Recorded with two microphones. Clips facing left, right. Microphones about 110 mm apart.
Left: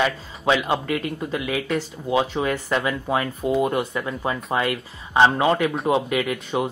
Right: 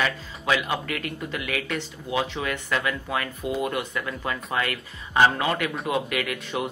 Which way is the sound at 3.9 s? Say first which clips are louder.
Left 4 dB; 25° left (ahead or behind).